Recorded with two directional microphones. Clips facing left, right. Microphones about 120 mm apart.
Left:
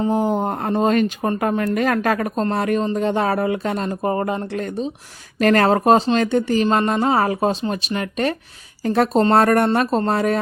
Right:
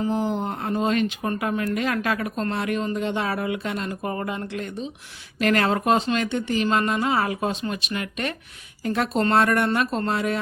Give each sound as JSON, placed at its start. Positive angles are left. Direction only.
{"t": 0.1, "sound": "speech", "side_deg": 45}